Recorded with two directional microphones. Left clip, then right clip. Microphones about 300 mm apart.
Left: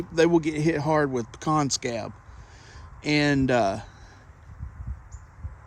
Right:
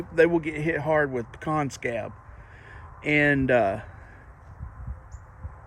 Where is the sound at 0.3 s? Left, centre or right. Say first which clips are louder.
Left 3 dB; left.